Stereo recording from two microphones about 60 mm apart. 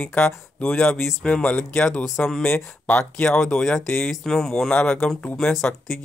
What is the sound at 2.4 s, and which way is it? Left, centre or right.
Speech, left.